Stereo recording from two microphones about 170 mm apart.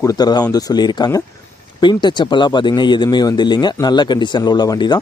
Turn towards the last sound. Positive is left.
turn(degrees=25)  # may be behind; listen again after turning